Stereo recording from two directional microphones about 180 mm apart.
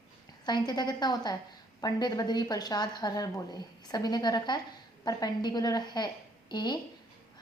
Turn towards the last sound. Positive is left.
turn(degrees=25)  # may be behind; listen again after turning